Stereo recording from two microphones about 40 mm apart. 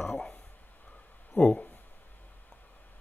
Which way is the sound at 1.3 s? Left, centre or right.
Left.